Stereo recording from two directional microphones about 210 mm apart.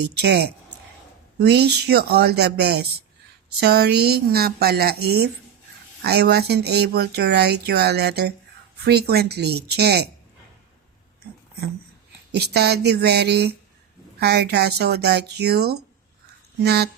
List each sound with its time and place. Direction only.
0.0 s speech: 50° right (ahead or behind)
12.3 s speech: 50° right (ahead or behind)